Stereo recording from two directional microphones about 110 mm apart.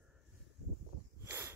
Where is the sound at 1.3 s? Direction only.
20° right (ahead or behind).